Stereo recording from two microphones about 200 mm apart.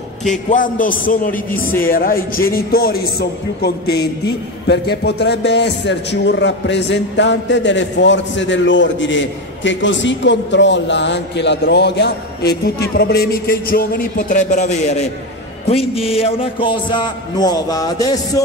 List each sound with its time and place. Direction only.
0.5 s a man's voice: 40° left (ahead or behind); by 18.4 s 20° left (ahead or behind)